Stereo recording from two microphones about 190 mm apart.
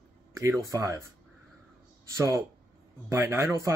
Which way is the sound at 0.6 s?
15° right (ahead or behind).